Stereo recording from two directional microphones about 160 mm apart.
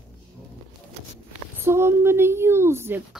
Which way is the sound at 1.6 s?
15° right (ahead or behind).